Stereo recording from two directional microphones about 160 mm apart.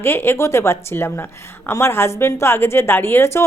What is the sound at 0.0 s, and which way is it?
A woman's voice, 15° left (ahead or behind).